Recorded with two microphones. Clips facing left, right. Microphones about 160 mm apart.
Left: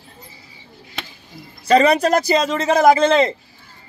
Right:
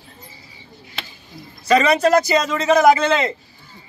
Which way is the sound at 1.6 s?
30° left (ahead or behind).